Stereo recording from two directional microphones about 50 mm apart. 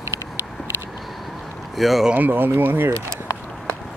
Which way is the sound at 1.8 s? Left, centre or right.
Centre.